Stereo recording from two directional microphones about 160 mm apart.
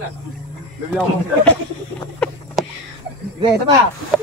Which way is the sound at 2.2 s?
5° left (ahead or behind).